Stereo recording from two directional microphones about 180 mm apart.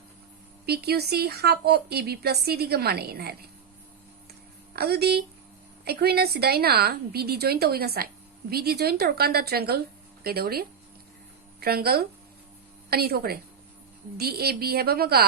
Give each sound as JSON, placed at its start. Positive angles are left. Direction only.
{"t": 0.6, "sound": "a woman's voice", "side_deg": -60}
{"t": 4.7, "sound": "a woman's voice", "side_deg": -60}